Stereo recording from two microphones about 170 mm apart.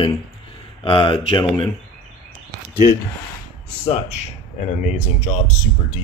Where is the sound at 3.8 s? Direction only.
35° left (ahead or behind).